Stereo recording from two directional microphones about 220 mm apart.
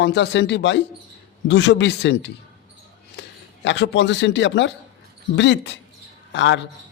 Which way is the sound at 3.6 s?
55° left (ahead or behind).